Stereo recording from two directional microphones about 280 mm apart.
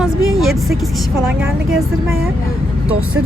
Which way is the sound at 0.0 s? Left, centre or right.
Centre.